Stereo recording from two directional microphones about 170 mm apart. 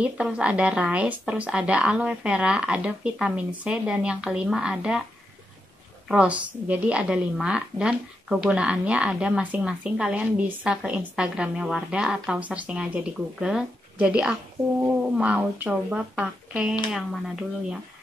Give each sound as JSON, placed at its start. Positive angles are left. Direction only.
{"t": 0.0, "sound": "speech", "side_deg": -5}
{"t": 6.0, "sound": "a woman's voice", "side_deg": -5}